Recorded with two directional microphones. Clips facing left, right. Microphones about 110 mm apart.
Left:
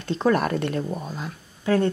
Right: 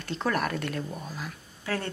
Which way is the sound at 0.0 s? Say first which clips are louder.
Left 7 dB; 20° left (ahead or behind).